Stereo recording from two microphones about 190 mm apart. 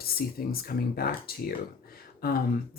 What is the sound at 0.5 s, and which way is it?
Speech, 50° left (ahead or behind).